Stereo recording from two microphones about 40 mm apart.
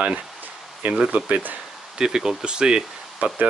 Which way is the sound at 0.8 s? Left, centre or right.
Right.